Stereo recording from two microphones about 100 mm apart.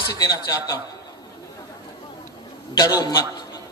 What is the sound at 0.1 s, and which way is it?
Speech, 40° left (ahead or behind).